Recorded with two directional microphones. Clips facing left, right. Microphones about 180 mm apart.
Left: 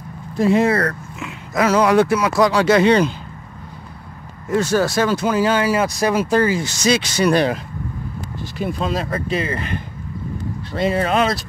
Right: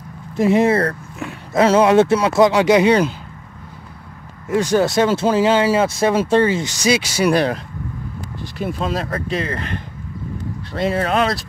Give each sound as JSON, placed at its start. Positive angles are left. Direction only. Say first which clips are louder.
{"t": 0.4, "sound": "speech", "louder": "right 1 dB", "side_deg": -20}
{"t": 4.5, "sound": "speech", "louder": "right 1 dB", "side_deg": -15}
{"t": 6.7, "sound": "speech", "louder": "even", "side_deg": -10}